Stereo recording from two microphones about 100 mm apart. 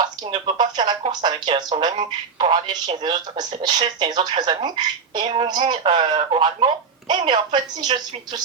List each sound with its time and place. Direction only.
0.0 s speech: 50° right (ahead or behind)
6.1 s speech: 60° right (ahead or behind)